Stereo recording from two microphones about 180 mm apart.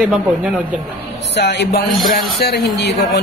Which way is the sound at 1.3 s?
70° left (ahead or behind).